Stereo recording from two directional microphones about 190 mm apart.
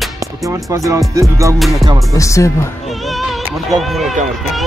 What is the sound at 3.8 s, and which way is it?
Speech, centre (ahead or behind).